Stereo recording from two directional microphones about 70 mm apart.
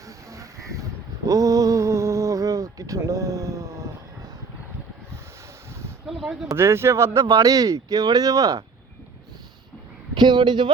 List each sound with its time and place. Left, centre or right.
0.3 s a sound: right
6.1 s speech: centre
6.6 s speech: right
7.2 s speech: right
10.2 s a man's voice: right